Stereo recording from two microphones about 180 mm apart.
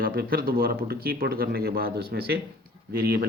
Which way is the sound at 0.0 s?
55° right (ahead or behind).